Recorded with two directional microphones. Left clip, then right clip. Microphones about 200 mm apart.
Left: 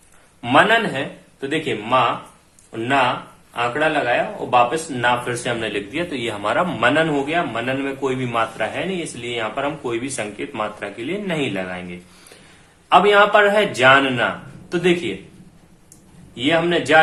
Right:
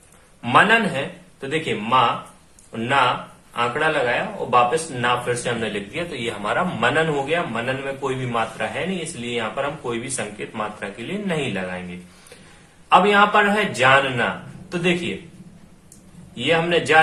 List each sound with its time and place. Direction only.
0.4 s a man's voice: 25° left (ahead or behind)
12.9 s a man's voice: 30° left (ahead or behind)
16.3 s a man's voice: 30° left (ahead or behind)